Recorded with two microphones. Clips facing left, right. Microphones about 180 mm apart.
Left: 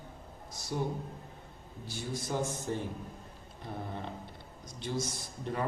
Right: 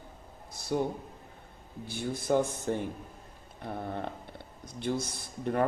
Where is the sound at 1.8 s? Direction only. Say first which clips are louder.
Right 6 dB; 55° right (ahead or behind).